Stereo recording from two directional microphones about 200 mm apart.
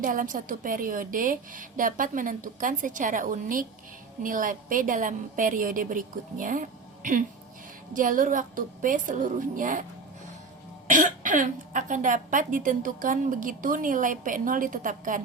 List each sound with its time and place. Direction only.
0.0 s speech: 40° right (ahead or behind)
10.8 s speech: 40° right (ahead or behind)